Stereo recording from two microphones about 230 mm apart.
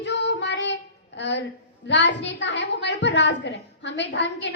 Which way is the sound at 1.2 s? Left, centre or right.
Left.